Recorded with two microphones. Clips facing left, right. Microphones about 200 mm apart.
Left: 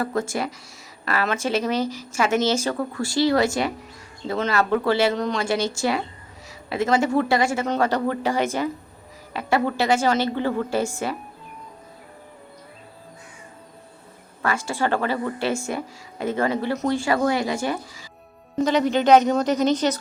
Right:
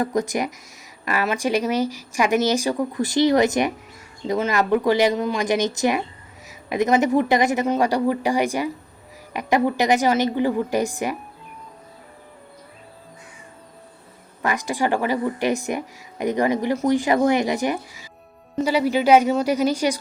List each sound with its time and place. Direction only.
0.0 s a woman's voice: 15° right (ahead or behind)
14.4 s a woman's voice: 15° right (ahead or behind)